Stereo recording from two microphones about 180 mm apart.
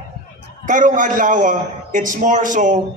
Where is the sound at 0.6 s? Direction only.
45° right (ahead or behind).